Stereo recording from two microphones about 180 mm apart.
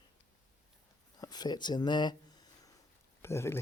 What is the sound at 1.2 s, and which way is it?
Speech, 20° left (ahead or behind).